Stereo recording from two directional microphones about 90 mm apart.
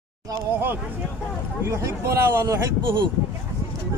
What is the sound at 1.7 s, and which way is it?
Speech, 30° right (ahead or behind).